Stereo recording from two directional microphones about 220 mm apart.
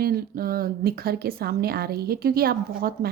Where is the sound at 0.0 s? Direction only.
45° right (ahead or behind).